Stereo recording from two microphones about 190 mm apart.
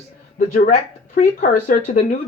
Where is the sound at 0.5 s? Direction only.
40° left (ahead or behind).